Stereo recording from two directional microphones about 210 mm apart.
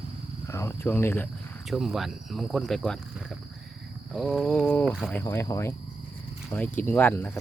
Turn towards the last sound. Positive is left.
turn(degrees=10)  # may be behind; listen again after turning